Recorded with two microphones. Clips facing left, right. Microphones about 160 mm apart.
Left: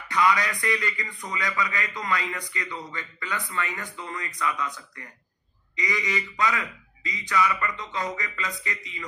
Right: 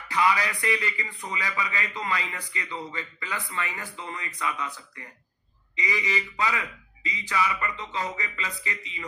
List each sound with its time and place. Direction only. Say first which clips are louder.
0.1 s a man's voice: left 1 dB; 30° right (ahead or behind)